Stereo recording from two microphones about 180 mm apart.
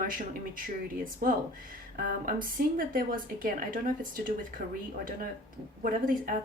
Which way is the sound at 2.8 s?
50° right (ahead or behind).